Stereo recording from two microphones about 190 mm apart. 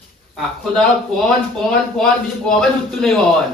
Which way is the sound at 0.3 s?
5° left (ahead or behind).